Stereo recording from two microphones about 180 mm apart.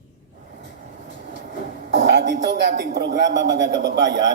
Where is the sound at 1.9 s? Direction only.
80° right.